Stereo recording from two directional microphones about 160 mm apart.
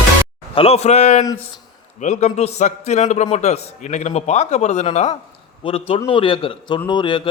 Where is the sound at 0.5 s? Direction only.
40° left (ahead or behind).